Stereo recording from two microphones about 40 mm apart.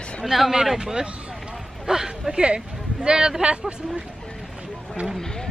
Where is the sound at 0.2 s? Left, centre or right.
Centre; by 4.0 s right.